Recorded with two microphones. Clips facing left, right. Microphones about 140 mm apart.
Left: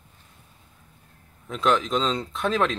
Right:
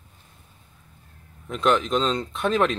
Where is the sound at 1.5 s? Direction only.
Centre (ahead or behind).